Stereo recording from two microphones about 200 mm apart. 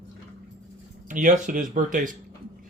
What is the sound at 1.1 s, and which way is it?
Speech, 40° right (ahead or behind).